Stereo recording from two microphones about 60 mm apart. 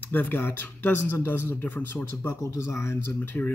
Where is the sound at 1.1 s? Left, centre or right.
Left.